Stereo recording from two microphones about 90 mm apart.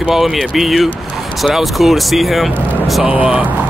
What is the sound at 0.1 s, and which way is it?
Speech, centre (ahead or behind).